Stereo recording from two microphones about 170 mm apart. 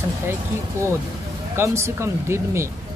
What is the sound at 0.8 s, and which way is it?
Speech, 15° right (ahead or behind).